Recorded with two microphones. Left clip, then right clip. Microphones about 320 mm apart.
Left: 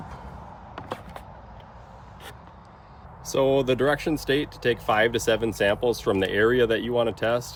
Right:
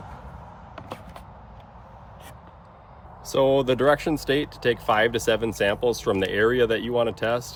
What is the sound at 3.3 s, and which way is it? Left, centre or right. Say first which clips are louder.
Speech: right 1 dB; centre.